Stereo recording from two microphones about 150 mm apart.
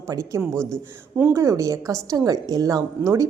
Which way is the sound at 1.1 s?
15° right (ahead or behind).